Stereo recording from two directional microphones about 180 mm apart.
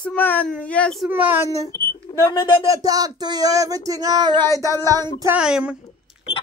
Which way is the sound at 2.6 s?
20° right (ahead or behind).